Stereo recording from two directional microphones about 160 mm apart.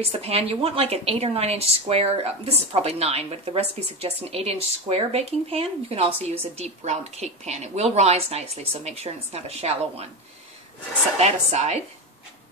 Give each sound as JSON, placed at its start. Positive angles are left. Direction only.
{"t": 0.2, "sound": "speech", "side_deg": -40}
{"t": 11.1, "sound": "a woman's voice", "side_deg": -40}